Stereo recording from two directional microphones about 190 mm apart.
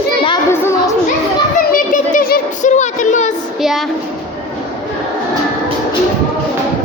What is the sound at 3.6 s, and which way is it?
Speech, centre (ahead or behind).